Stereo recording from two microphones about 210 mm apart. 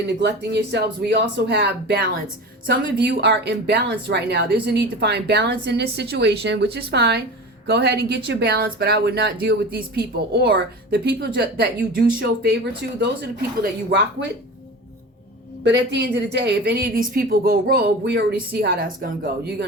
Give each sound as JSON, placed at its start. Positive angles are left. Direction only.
{"t": 0.2, "sound": "speech", "side_deg": -55}
{"t": 13.6, "sound": "speech", "side_deg": -50}
{"t": 15.6, "sound": "speech", "side_deg": -55}